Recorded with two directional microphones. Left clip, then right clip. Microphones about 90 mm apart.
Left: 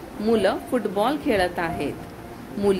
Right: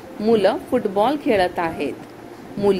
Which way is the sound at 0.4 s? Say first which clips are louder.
Right 4 dB; 35° right (ahead or behind).